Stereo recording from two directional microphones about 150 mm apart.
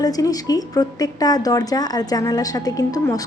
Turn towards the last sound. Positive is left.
turn(degrees=25)  # may be behind; listen again after turning